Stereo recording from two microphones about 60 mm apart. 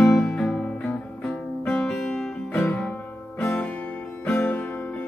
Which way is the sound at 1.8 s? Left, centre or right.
Centre.